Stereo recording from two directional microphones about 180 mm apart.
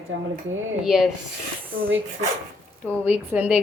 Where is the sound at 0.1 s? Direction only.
90° right.